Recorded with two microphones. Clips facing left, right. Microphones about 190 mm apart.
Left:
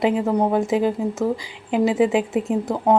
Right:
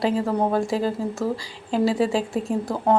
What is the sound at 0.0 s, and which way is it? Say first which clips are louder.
A woman's voice: left 3 dB; 15° left (ahead or behind).